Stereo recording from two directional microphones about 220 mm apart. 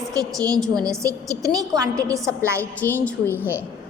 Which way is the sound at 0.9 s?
15° right (ahead or behind).